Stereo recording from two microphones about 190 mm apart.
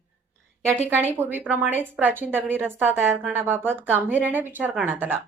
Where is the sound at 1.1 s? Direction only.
10° right (ahead or behind).